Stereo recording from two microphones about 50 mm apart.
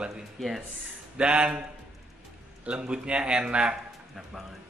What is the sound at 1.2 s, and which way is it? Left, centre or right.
Speech, right.